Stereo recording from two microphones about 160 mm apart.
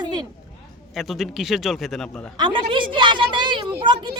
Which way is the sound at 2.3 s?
30° right (ahead or behind).